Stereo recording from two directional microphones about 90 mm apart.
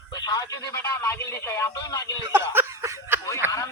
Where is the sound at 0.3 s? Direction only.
40° left (ahead or behind).